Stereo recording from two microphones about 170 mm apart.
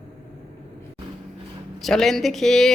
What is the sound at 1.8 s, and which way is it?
Speech, centre (ahead or behind).